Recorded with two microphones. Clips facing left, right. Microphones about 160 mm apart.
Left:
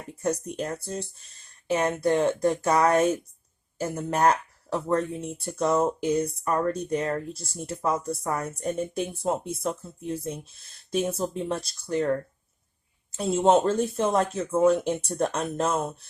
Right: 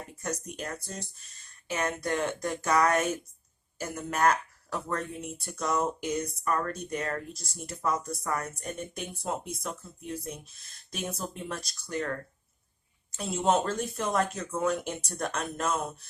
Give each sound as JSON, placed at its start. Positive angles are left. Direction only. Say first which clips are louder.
{"t": 0.2, "sound": "speech", "louder": "left 8 dB", "side_deg": 30}